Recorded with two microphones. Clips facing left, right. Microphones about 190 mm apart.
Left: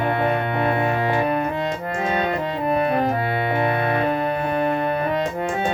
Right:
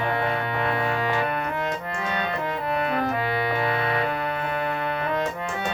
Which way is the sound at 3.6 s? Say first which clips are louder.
Left 4 dB; 50° left (ahead or behind).